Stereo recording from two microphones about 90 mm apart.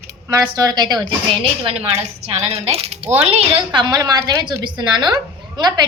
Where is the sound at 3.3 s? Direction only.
75° right (ahead or behind).